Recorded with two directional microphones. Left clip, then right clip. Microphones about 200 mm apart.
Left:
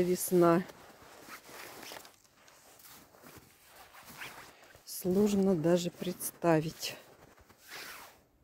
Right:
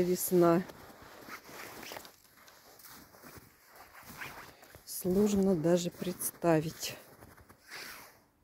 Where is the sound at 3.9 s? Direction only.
30° right (ahead or behind).